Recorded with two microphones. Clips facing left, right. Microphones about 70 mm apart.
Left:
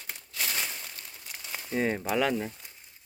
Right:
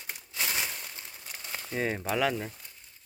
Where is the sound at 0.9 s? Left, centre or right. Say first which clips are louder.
Even; right.